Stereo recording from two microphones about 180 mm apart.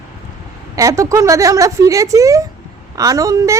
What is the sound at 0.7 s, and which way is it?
A woman's voice, 20° right (ahead or behind).